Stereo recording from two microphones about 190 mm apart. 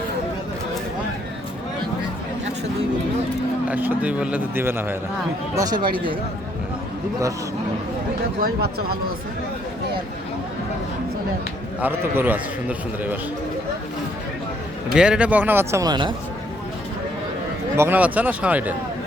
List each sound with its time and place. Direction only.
3.7 s a man's voice: 10° right (ahead or behind)
5.5 s speech: 20° right (ahead or behind)
8.4 s speech: 50° right (ahead or behind)
11.8 s a man's voice: 10° right (ahead or behind)
14.9 s a man's voice: 5° right (ahead or behind); by 16.1 s 25° right (ahead or behind)
17.7 s a man's voice: 10° right (ahead or behind)